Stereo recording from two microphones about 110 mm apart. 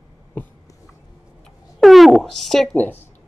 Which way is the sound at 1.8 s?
Centre (ahead or behind).